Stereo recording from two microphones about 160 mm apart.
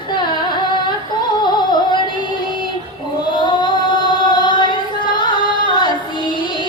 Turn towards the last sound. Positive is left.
turn(degrees=30)  # may be behind; listen again after turning